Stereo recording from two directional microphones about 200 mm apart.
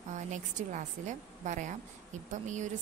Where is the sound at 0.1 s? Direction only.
35° right (ahead or behind).